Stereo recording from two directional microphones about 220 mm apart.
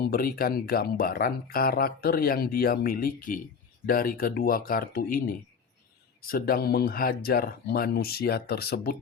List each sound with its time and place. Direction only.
0.1 s speech: 40° left (ahead or behind)